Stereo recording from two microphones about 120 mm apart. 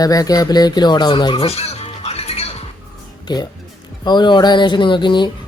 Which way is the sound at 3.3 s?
35° left (ahead or behind).